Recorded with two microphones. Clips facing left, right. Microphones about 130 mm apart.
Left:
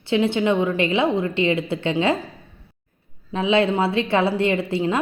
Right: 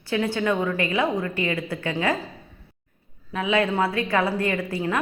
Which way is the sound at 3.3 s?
25° left (ahead or behind).